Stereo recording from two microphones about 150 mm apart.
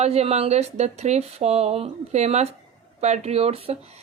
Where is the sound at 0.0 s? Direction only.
45° right (ahead or behind).